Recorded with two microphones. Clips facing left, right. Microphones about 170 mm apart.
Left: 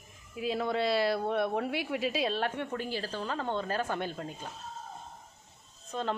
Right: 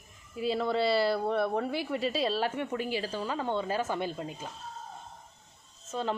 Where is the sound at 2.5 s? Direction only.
10° right (ahead or behind).